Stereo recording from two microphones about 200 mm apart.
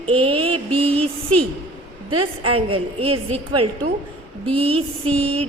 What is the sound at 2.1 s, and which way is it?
Speech, 90° right.